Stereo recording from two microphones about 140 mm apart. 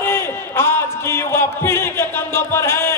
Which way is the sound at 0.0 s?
15° left (ahead or behind).